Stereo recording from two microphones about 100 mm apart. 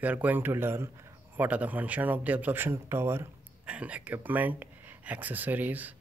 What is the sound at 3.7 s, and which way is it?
Speech, 15° right (ahead or behind).